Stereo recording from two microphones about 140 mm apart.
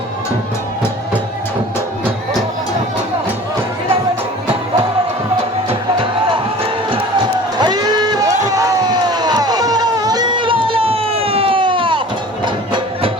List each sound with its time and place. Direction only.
5.6 s music: 40° right (ahead or behind)
7.6 s a sound: 30° right (ahead or behind)
8.4 s crowd: 25° right (ahead or behind)